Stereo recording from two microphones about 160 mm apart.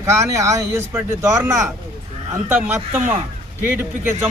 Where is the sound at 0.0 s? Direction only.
20° right (ahead or behind).